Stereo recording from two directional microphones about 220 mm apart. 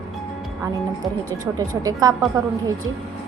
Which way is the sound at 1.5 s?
15° right (ahead or behind).